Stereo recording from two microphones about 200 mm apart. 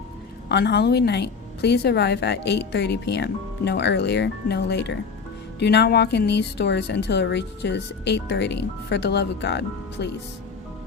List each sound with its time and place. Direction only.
0.4 s a woman's voice: 55° left (ahead or behind)